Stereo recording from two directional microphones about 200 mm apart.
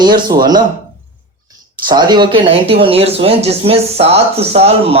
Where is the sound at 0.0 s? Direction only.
20° right (ahead or behind).